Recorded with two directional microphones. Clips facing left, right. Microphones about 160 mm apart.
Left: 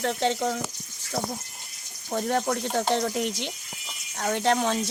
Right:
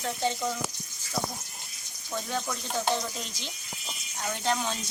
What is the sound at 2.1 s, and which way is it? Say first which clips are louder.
Speech: left 7 dB; 55° left (ahead or behind).